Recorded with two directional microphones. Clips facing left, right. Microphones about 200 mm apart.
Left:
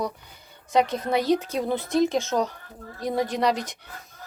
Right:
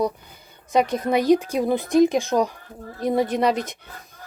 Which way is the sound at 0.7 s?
15° right (ahead or behind).